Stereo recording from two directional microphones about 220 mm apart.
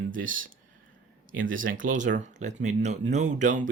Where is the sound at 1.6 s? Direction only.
40° right (ahead or behind).